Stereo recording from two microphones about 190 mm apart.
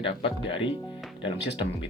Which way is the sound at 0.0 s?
25° left (ahead or behind).